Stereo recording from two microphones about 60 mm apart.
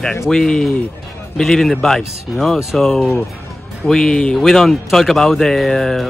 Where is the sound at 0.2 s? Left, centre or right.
Centre.